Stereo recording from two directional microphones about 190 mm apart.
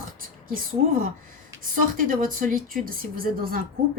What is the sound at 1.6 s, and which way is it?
A woman's voice, 45° right (ahead or behind).